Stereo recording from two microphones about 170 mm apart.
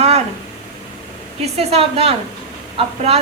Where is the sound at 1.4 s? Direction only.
35° right (ahead or behind).